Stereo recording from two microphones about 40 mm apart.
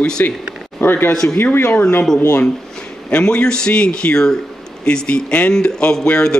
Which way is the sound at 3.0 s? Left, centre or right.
Left.